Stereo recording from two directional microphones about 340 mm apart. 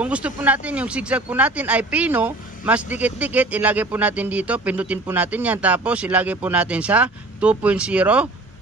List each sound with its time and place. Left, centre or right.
0.0 s speech: centre